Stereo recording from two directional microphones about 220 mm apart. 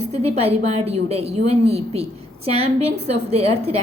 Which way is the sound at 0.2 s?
25° right (ahead or behind).